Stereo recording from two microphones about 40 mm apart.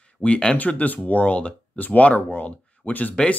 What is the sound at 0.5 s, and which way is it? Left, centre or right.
Speech, left.